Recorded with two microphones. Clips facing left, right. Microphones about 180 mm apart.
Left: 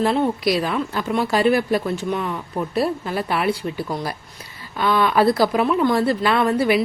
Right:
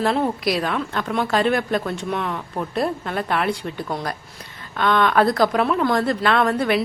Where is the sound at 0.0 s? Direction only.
Centre (ahead or behind).